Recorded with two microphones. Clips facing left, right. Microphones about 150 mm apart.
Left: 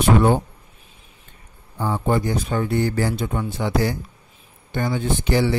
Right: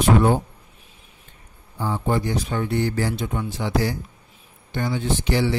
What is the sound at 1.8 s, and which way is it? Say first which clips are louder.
Speech: left 2 dB; 50° left (ahead or behind).